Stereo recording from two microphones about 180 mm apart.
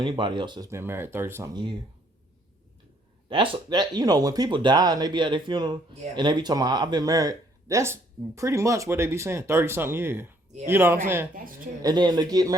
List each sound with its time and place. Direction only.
0.0 s speech: 25° right (ahead or behind)
3.2 s speech: 25° right (ahead or behind)